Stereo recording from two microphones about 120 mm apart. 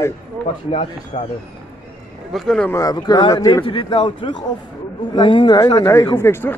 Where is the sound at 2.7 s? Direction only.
30° left (ahead or behind).